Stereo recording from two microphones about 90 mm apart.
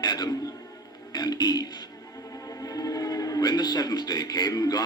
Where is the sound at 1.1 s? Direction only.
50° left (ahead or behind).